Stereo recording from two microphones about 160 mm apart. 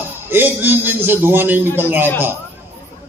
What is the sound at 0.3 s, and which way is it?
A man's voice, 15° right (ahead or behind).